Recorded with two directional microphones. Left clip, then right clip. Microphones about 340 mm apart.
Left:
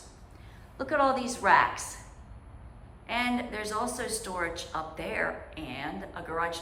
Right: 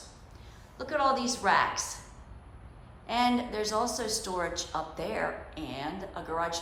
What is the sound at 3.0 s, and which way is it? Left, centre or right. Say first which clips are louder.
A woman's voice: right 2 dB; centre.